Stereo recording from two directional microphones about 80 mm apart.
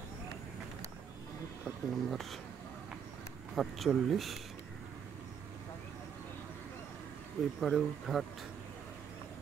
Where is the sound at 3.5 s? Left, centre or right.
Centre.